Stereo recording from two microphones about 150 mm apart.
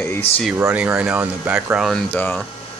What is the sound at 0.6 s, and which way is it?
Speech, 15° right (ahead or behind).